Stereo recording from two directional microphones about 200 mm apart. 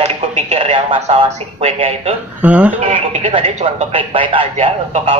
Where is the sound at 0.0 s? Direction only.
35° right (ahead or behind).